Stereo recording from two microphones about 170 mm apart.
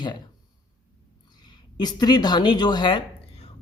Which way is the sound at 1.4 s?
25° left (ahead or behind).